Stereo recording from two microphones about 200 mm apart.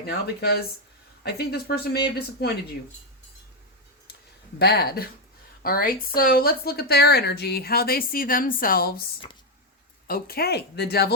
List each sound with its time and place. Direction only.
0.0 s a woman's voice: 50° left (ahead or behind)
4.6 s a woman's voice: 50° left (ahead or behind)
10.1 s a woman's voice: 50° left (ahead or behind)